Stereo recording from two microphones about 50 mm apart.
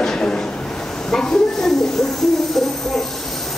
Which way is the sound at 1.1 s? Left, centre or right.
Centre.